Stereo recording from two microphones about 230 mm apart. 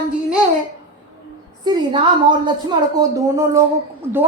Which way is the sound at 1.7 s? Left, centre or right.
Centre.